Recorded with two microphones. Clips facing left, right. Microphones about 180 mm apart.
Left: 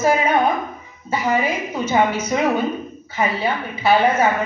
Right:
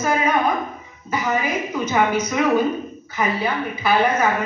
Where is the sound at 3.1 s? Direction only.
25° left (ahead or behind).